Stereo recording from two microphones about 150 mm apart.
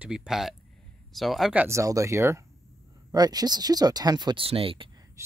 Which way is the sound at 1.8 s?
20° right (ahead or behind).